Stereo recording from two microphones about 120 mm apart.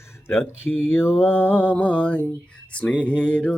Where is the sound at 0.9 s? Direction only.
20° left (ahead or behind).